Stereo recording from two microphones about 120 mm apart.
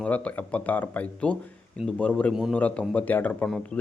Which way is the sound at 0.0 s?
10° left (ahead or behind).